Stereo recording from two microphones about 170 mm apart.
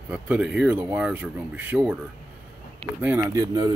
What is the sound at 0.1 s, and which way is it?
Speech, 5° right (ahead or behind).